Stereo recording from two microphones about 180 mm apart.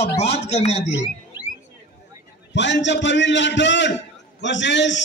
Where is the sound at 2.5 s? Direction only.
80° left.